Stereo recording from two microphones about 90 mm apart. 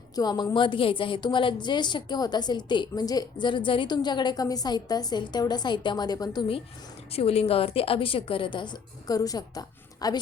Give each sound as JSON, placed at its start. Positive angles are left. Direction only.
{"t": 0.2, "sound": "a woman's voice", "side_deg": 50}
{"t": 0.5, "sound": "a woman's voice", "side_deg": 65}
{"t": 7.1, "sound": "a woman's voice", "side_deg": 90}